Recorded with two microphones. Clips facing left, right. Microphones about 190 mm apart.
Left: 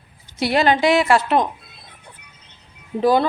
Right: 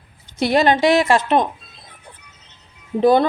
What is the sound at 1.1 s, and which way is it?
Speech, 20° right (ahead or behind).